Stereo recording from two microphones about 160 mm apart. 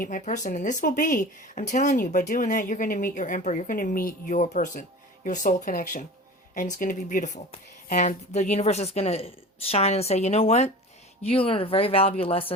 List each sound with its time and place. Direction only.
0.0 s speech: 55° left (ahead or behind); by 12.5 s 35° left (ahead or behind)